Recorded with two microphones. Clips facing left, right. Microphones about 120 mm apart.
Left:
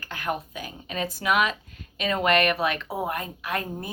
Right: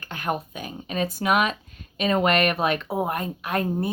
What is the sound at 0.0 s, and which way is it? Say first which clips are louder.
Speech: right 2 dB; 25° right (ahead or behind).